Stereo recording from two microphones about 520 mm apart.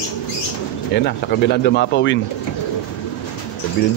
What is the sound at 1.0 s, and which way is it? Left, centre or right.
Speech, centre.